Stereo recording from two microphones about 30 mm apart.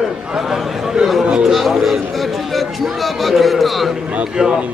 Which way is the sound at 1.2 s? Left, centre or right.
Right.